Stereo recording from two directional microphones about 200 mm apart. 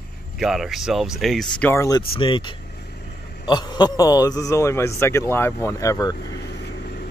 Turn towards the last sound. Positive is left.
turn(degrees=55)  # may be behind; listen again after turning